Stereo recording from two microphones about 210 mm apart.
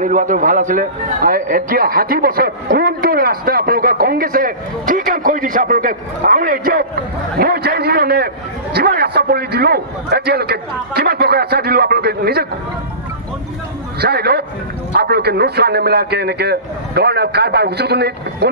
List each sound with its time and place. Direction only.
0.0 s a man's voice: 40° right (ahead or behind)
13.9 s a man's voice: 50° right (ahead or behind)